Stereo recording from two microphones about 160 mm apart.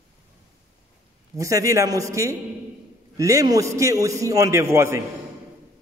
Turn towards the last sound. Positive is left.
turn(degrees=-15)  # may be behind; listen again after turning